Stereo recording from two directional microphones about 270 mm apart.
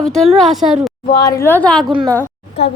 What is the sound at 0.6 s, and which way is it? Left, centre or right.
Speech, right.